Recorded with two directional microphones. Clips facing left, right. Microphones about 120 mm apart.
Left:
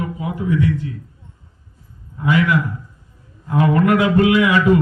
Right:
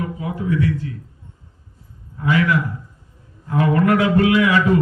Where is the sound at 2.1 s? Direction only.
15° left (ahead or behind).